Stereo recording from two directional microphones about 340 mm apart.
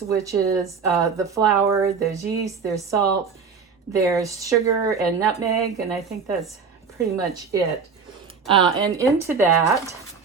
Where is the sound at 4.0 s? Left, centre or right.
Centre.